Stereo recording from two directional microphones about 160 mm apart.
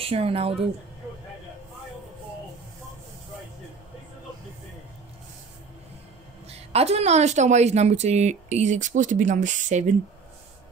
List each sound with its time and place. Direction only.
0.0 s speech: 35° right (ahead or behind)
6.7 s speech: 40° right (ahead or behind)